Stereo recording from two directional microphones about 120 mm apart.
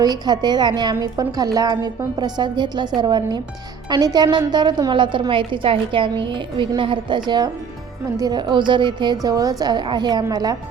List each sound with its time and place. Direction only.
0.0 s a woman's voice: 35° right (ahead or behind)